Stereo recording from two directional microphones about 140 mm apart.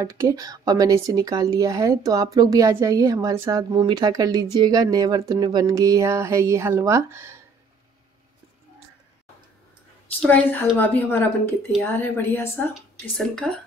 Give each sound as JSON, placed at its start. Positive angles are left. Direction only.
{"t": 0.0, "sound": "speech", "side_deg": -20}
{"t": 3.7, "sound": "speech", "side_deg": -30}
{"t": 10.2, "sound": "a woman's voice", "side_deg": 10}